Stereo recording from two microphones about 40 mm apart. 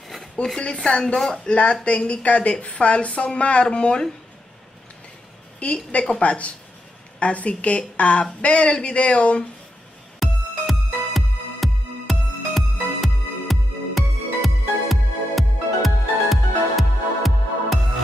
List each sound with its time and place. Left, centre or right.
0.1 s a sound: centre
0.6 s a woman's voice: left
1.4 s a woman's voice: left
5.6 s a woman's voice: left
10.2 s music: centre